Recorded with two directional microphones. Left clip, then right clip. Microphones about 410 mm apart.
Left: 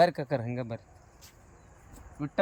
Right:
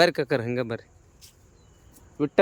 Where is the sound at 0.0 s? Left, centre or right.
Centre.